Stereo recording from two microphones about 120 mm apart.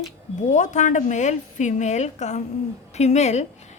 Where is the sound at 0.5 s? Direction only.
90° left; by 3.4 s 70° left (ahead or behind).